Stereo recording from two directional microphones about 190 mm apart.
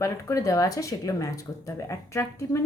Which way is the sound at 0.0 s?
15° left (ahead or behind).